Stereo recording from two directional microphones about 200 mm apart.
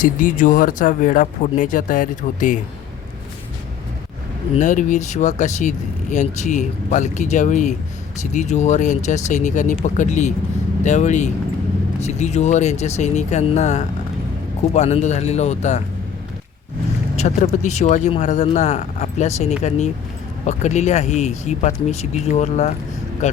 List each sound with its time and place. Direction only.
0.0 s speech: 40° left (ahead or behind)
4.5 s speech: 40° left (ahead or behind)
17.2 s speech: 40° left (ahead or behind)